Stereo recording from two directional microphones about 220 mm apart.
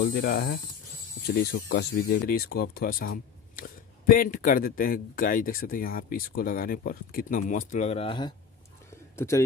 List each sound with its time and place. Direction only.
0.0 s a man's voice: 40° left (ahead or behind); by 9.4 s 10° left (ahead or behind)